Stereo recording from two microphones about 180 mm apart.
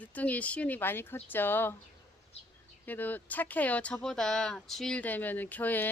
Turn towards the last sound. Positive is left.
turn(degrees=10)  # may be behind; listen again after turning